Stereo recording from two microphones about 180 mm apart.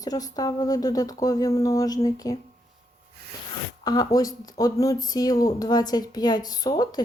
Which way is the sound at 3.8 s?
20° left (ahead or behind).